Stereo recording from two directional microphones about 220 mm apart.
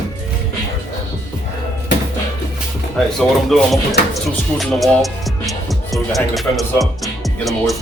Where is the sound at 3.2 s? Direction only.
Centre (ahead or behind).